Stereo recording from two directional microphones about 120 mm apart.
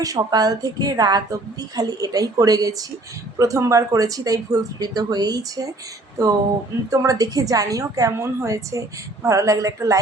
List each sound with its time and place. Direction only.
0.0 s a woman's voice: 30° right (ahead or behind)